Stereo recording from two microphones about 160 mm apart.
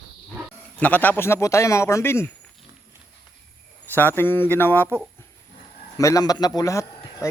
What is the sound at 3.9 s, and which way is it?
Speech, 15° left (ahead or behind).